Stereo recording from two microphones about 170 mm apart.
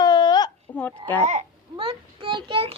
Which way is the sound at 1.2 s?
40° right (ahead or behind).